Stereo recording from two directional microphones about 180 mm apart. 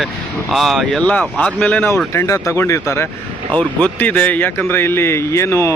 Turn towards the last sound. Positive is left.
turn(degrees=15)  # may be behind; listen again after turning